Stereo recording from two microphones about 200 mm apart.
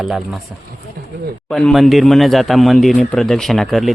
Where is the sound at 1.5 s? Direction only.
Centre (ahead or behind).